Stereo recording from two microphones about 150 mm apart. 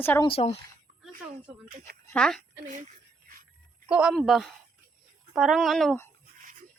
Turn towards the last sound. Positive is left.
turn(degrees=0)  # may be behind; listen again after turning